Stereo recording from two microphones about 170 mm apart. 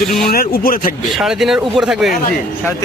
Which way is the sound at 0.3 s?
60° left (ahead or behind).